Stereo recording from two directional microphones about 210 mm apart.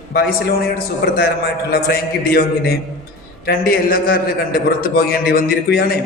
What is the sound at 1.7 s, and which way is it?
A man's voice, 45° left (ahead or behind).